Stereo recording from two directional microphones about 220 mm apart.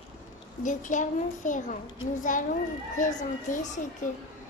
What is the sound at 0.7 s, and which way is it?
A child's voice, 35° left (ahead or behind).